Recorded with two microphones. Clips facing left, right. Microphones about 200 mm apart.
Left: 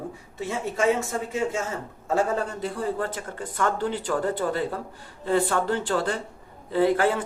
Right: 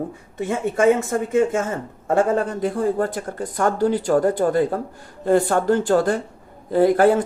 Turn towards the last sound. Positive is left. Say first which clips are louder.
# right 6 dB
turn(degrees=-45)  # may be behind; listen again after turning